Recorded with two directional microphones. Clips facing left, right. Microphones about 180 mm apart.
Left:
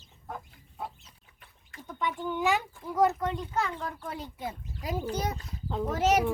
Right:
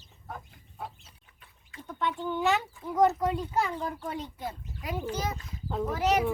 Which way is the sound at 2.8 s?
Centre (ahead or behind).